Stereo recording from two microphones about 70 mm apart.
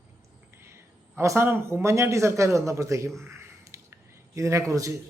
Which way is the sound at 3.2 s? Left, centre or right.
Right.